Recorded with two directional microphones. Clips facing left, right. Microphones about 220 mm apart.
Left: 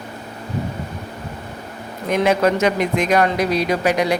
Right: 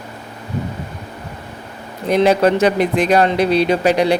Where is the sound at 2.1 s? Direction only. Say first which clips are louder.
Right 3 dB; 35° right (ahead or behind).